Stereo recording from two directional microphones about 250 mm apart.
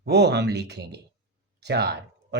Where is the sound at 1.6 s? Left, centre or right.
Right.